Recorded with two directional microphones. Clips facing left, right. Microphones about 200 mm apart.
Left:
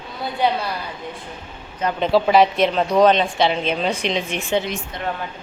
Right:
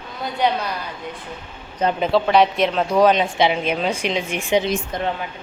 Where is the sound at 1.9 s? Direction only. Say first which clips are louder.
Left 2 dB; centre (ahead or behind).